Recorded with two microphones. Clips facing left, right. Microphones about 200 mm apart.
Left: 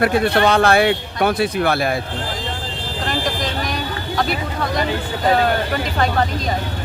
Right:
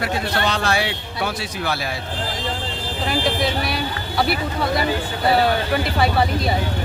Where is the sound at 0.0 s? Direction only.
55° left (ahead or behind).